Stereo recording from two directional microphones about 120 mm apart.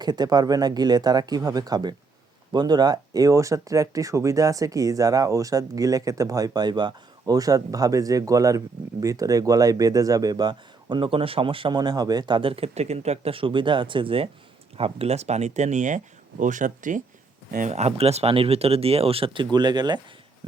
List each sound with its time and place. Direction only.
0.0 s speech: 35° right (ahead or behind); by 17.0 s 90° right
17.6 s speech: 70° right (ahead or behind); by 20.0 s 35° right (ahead or behind)